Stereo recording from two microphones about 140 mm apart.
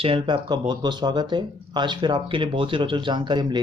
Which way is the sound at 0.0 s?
35° right (ahead or behind).